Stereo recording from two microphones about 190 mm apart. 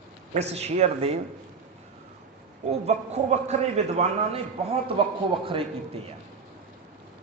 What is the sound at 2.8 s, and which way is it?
A man's voice, 35° right (ahead or behind).